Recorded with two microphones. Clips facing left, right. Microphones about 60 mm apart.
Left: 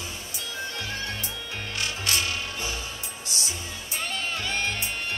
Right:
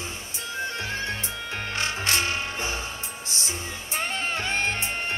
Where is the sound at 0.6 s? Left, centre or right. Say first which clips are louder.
Right 4 dB; right.